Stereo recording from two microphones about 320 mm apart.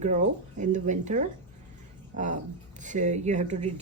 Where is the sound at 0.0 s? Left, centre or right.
Right.